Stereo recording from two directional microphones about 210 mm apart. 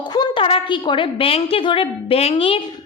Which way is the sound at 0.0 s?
20° left (ahead or behind).